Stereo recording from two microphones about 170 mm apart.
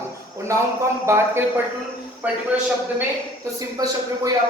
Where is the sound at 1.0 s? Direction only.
15° right (ahead or behind).